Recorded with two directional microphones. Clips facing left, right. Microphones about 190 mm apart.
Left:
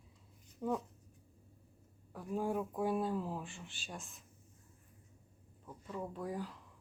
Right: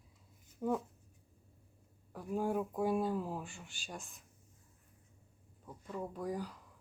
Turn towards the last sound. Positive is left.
turn(degrees=0)  # may be behind; listen again after turning